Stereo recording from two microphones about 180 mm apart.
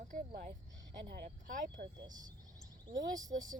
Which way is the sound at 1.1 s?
50° right (ahead or behind).